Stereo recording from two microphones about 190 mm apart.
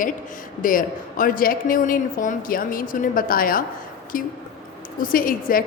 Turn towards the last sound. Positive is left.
turn(degrees=50)  # may be behind; listen again after turning